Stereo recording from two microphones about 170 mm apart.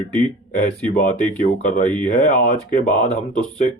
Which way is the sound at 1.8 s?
50° left (ahead or behind).